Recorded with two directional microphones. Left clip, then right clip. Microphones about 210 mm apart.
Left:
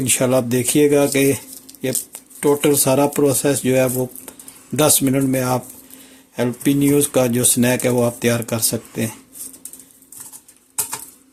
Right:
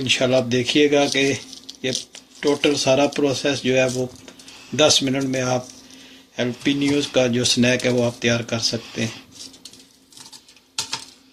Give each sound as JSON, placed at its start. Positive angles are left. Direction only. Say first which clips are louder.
{"t": 0.2, "sound": "speech", "louder": "left 1 dB", "side_deg": 55}
{"t": 2.4, "sound": "speech", "louder": "left 3 dB", "side_deg": 55}